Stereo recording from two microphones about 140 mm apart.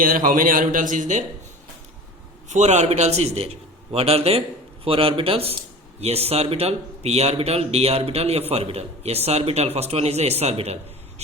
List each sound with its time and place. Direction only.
0.0 s speech: 80° right; by 1.2 s 65° right (ahead or behind)
2.5 s a man's voice: 55° right (ahead or behind)